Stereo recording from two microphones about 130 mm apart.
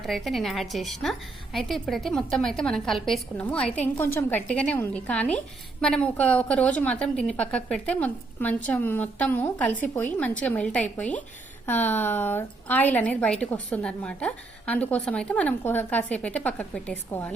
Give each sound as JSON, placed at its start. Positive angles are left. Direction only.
{"t": 0.0, "sound": "a woman's voice", "side_deg": 0}